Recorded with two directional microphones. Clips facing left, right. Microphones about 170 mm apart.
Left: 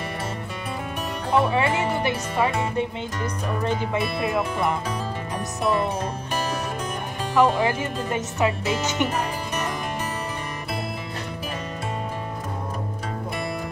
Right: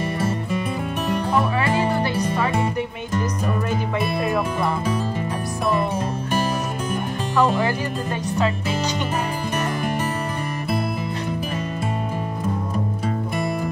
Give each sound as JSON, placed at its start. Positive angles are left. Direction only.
{"t": 1.3, "sound": "music", "side_deg": 25}
{"t": 7.3, "sound": "speech", "side_deg": 20}